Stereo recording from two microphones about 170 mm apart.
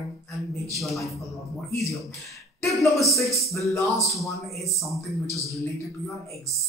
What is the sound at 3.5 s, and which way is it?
Speech, 15° left (ahead or behind).